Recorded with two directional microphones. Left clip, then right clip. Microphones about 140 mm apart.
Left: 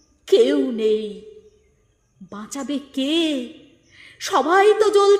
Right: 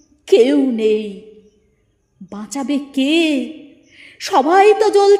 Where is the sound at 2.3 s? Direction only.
25° right (ahead or behind).